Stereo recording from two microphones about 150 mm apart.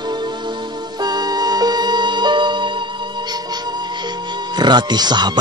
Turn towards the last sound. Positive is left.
turn(degrees=-30)  # may be behind; listen again after turning